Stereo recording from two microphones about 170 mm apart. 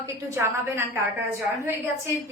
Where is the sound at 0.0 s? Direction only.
15° right (ahead or behind).